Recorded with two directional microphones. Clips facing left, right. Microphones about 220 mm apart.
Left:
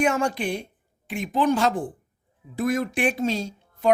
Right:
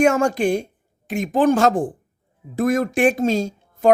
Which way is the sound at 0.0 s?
45° right (ahead or behind).